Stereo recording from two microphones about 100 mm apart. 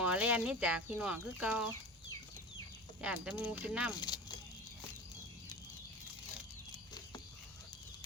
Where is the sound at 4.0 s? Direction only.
50° left (ahead or behind).